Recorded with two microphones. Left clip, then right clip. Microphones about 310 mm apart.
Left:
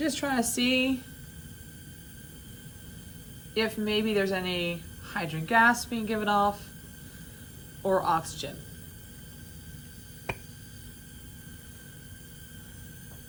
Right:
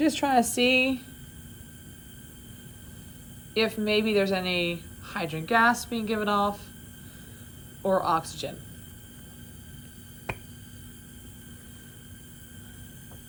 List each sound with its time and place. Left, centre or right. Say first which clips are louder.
0.0 s speech: right 6 dB; centre
3.5 s a woman's voice: right 3 dB; centre
7.8 s a woman's voice: right 1 dB; centre